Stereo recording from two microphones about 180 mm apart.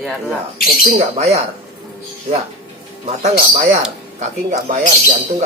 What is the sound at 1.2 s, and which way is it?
Speech, 35° right (ahead or behind).